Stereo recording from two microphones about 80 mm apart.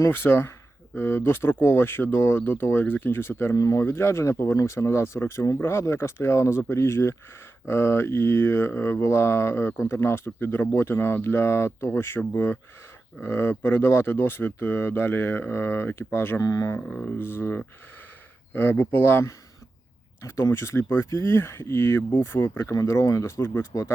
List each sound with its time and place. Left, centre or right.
0.1 s speech: left
3.5 s speech: left
16.4 s speech: left
16.8 s a sound: centre
17.2 s speech: left
22.9 s speech: left